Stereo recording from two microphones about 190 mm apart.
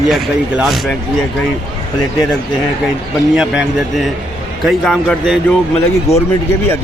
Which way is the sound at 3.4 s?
Centre (ahead or behind).